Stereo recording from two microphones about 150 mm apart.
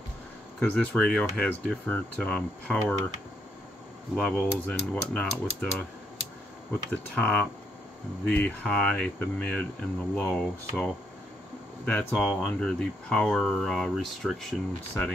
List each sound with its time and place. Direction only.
0.6 s speech: 10° left (ahead or behind)
4.1 s speech: 5° left (ahead or behind)
6.9 s speech: 5° left (ahead or behind)